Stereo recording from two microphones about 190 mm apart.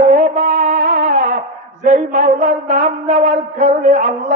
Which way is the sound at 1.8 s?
40° right (ahead or behind).